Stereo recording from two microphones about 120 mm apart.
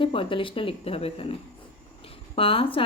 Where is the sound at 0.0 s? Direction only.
45° left (ahead or behind).